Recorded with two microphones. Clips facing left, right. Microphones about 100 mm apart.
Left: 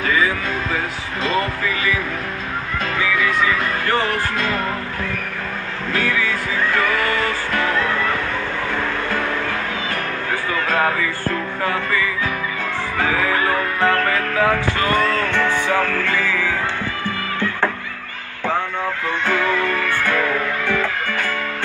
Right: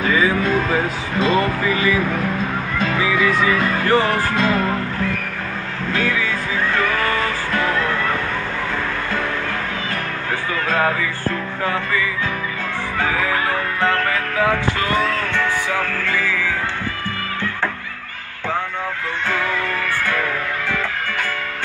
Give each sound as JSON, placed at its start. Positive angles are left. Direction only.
{"t": 0.0, "sound": "music", "side_deg": -25}
{"t": 7.6, "sound": "music", "side_deg": 0}